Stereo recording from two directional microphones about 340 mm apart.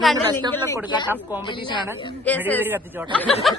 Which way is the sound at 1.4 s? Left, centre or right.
Centre.